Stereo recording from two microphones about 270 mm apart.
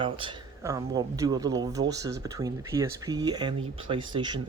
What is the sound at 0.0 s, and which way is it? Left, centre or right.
Speech, centre.